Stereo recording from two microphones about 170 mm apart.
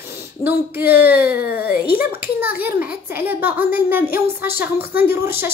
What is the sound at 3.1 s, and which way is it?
Speech, 10° right (ahead or behind).